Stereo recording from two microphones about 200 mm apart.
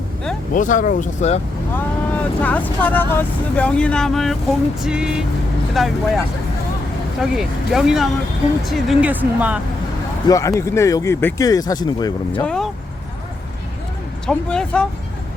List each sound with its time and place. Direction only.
0.5 s speech: 40° left (ahead or behind)
1.7 s speech: 10° left (ahead or behind)
10.2 s speech: 15° left (ahead or behind)
12.3 s speech: 5° left (ahead or behind)
14.3 s speech: 5° left (ahead or behind)